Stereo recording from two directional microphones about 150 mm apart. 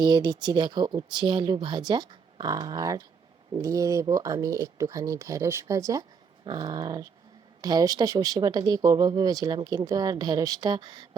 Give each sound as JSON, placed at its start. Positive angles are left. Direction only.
{"t": 0.0, "sound": "speech", "side_deg": -30}